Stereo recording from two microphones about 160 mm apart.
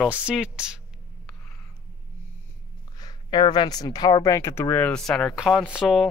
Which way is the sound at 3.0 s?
25° left (ahead or behind).